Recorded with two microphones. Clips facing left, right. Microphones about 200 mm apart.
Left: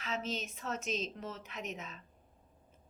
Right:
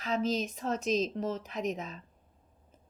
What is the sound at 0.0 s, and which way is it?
A woman's voice, 35° right (ahead or behind).